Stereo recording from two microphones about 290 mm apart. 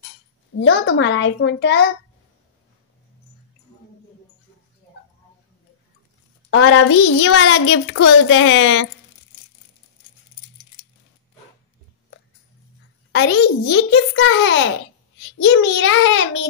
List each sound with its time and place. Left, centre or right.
0.6 s a child's voice: left
6.5 s a child's voice: left
13.1 s a child's voice: left